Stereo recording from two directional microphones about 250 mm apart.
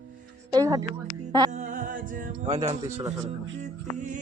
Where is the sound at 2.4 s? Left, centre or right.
Right.